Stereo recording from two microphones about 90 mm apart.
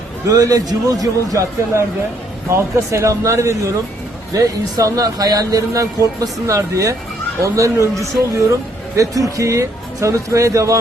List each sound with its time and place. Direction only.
0.3 s speech: 45° right (ahead or behind)